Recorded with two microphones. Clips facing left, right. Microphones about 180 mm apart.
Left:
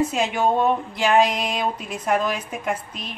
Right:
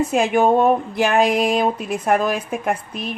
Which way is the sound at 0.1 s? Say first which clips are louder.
Right 5 dB; 50° right (ahead or behind).